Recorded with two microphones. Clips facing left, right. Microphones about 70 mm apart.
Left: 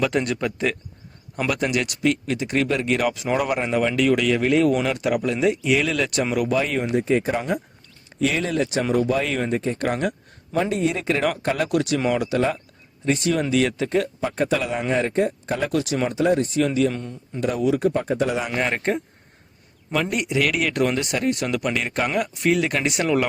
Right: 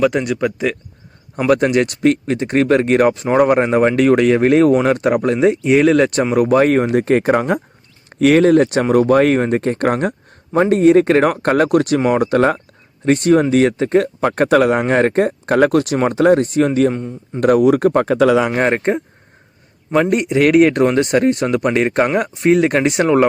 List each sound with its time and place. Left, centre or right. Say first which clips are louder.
0.0 s speech: right 6 dB; centre
1.5 s speech: right 10 dB; right
14.2 s speech: right 10 dB; right
16.9 s speech: right 7 dB; centre
17.4 s speech: right 9 dB; right
18.5 s speech: right 8 dB; right
18.8 s speech: right 6 dB; right